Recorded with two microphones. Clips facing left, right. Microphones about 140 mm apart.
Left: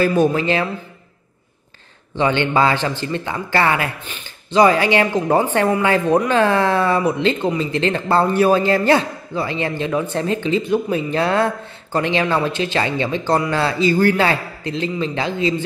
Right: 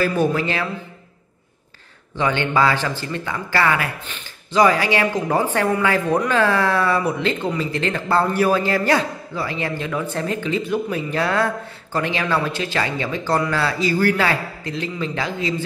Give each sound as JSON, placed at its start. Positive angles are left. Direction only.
{"t": 0.0, "sound": "a man's voice", "side_deg": 20}
{"t": 2.1, "sound": "a man's voice", "side_deg": 25}
{"t": 4.0, "sound": "speech", "side_deg": 10}
{"t": 4.6, "sound": "a man's voice", "side_deg": 25}